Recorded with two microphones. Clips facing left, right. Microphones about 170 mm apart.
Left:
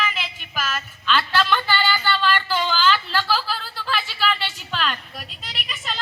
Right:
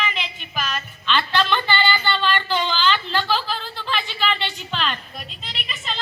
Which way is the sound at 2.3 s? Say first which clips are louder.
Even; 5° left (ahead or behind).